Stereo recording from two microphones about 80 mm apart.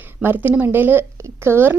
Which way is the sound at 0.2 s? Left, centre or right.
Right.